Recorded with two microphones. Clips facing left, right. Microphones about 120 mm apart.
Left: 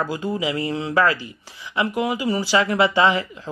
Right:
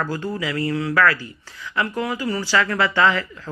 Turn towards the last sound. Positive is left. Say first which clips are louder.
# left 1 dB
turn(degrees=20)  # may be behind; listen again after turning